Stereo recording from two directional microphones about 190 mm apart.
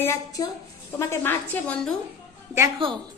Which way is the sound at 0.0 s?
15° left (ahead or behind).